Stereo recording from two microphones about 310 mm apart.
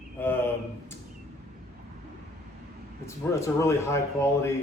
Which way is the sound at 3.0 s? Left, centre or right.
Centre.